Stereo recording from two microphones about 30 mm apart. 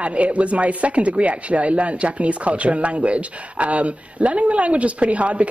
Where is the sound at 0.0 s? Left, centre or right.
Right.